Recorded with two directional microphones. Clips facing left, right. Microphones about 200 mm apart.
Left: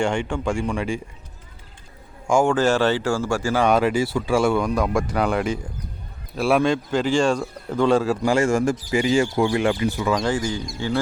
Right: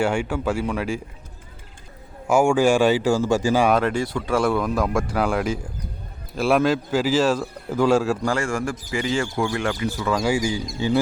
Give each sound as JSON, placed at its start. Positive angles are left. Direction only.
{"t": 0.0, "sound": "a man's voice", "side_deg": -5}
{"t": 2.2, "sound": "speech", "side_deg": -10}
{"t": 3.7, "sound": "a man's voice", "side_deg": 5}
{"t": 8.3, "sound": "speech", "side_deg": 20}
{"t": 10.1, "sound": "speech", "side_deg": -10}